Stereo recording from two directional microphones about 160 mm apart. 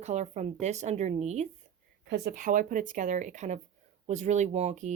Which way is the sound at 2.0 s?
65° right (ahead or behind).